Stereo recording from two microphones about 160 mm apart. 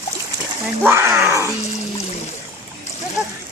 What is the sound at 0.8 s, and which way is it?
Speech, 15° right (ahead or behind).